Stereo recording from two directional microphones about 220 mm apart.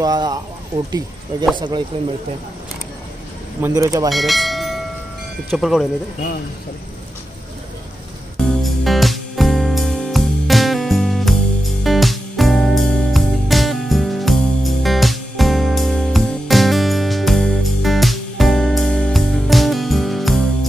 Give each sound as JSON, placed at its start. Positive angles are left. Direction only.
{"t": 0.0, "sound": "speech", "side_deg": -15}
{"t": 3.6, "sound": "speech", "side_deg": -15}
{"t": 4.1, "sound": "church bell", "side_deg": 0}
{"t": 5.5, "sound": "speech", "side_deg": 0}
{"t": 8.4, "sound": "music", "side_deg": 0}